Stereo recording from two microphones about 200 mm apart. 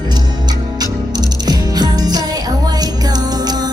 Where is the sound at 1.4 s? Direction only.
20° right (ahead or behind).